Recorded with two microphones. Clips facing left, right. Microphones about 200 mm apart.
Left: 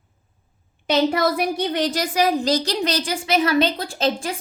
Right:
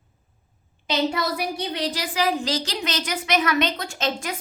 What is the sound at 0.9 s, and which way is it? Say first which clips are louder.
A woman's voice: left 5 dB; 50° left (ahead or behind).